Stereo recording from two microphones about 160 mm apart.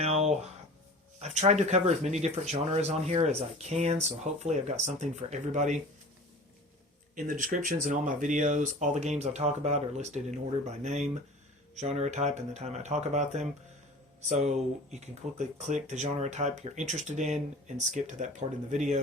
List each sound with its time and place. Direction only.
0.0 s a sound: 40° right (ahead or behind)
1.2 s speech: 45° right (ahead or behind)
7.3 s speech: 55° right (ahead or behind)